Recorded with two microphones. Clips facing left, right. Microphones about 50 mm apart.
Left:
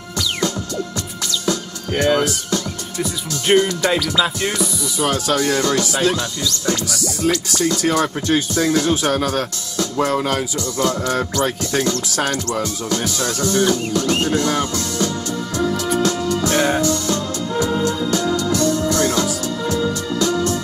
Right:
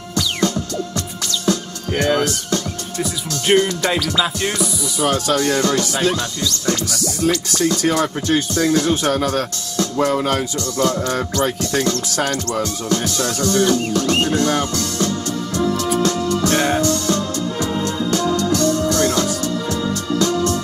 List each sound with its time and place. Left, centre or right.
1.4 s speech: centre
6.6 s music: centre
17.6 s music: centre
18.1 s music: centre